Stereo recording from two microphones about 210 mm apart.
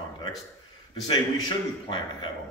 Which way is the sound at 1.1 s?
25° left (ahead or behind).